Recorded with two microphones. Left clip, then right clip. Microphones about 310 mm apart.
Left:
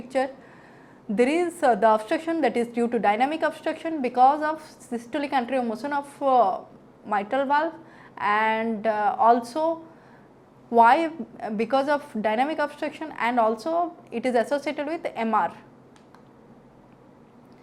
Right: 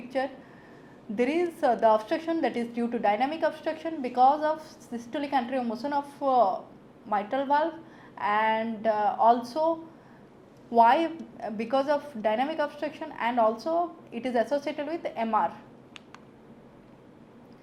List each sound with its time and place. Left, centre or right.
0.1 s a woman's voice: left